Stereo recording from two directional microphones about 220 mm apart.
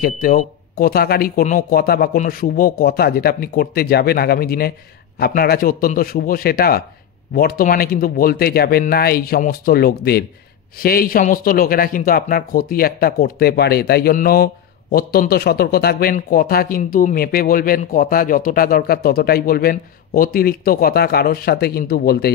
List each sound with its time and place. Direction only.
0.0 s speech: 40° left (ahead or behind)